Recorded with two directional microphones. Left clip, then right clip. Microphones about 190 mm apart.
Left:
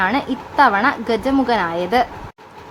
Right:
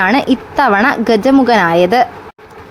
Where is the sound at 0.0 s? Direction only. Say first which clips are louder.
Right 7 dB; 30° right (ahead or behind).